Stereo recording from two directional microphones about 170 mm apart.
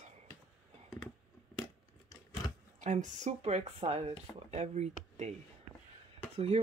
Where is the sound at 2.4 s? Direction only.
25° left (ahead or behind).